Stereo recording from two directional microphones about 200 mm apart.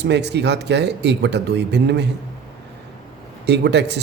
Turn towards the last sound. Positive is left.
turn(degrees=-60)  # may be behind; listen again after turning